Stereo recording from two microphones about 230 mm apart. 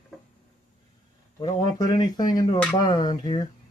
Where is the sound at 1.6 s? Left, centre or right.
Centre.